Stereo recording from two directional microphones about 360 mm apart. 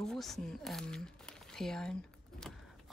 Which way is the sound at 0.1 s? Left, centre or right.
Centre.